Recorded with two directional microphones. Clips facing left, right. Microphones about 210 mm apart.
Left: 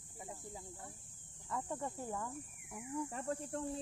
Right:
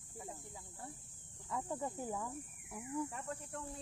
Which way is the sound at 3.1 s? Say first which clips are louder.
Left 5 dB; 35° left (ahead or behind).